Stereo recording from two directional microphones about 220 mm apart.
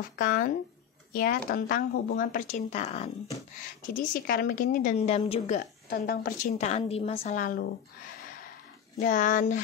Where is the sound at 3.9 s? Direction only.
40° left (ahead or behind).